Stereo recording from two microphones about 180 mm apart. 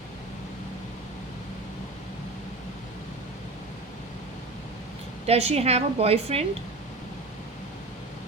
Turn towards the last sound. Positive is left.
turn(degrees=-35)  # may be behind; listen again after turning